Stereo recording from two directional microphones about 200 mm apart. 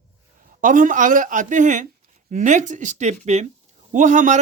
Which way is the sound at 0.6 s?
40° right (ahead or behind).